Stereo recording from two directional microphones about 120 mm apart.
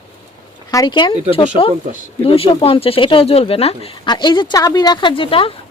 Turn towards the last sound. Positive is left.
turn(degrees=50)  # may be behind; listen again after turning